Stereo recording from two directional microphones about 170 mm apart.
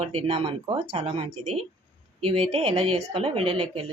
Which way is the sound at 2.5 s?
35° right (ahead or behind).